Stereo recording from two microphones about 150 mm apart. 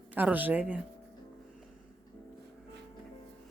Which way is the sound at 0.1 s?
10° right (ahead or behind).